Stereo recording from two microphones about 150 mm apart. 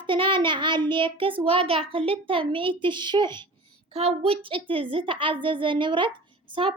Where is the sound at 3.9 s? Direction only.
40° right (ahead or behind).